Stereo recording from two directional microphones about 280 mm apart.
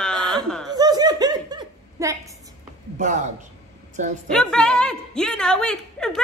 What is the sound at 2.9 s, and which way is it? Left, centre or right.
Speech, right.